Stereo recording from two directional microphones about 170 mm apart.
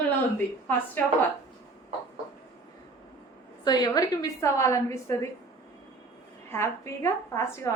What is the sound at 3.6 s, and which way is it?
A woman's voice, 25° left (ahead or behind).